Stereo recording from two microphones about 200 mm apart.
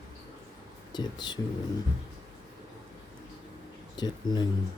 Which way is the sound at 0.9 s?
20° left (ahead or behind).